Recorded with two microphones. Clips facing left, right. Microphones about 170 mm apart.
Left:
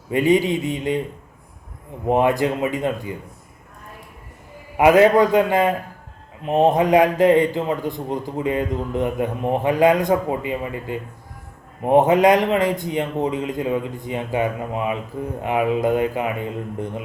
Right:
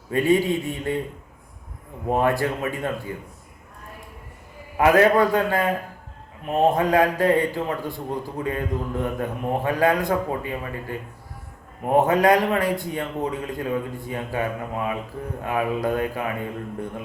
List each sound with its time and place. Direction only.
0.1 s speech: 15° left (ahead or behind)
2.0 s a man's voice: 20° left (ahead or behind)
4.8 s a man's voice: 20° left (ahead or behind)